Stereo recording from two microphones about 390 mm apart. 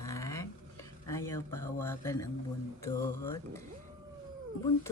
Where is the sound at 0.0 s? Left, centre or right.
Centre.